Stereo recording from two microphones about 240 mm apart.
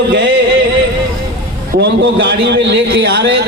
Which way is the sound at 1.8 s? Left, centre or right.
Right.